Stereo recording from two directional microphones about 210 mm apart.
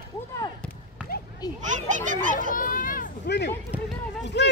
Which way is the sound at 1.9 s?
35° right (ahead or behind).